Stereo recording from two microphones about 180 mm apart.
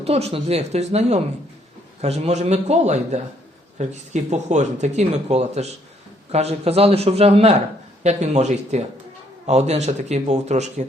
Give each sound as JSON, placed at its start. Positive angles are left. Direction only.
{"t": 0.0, "sound": "speech", "side_deg": -35}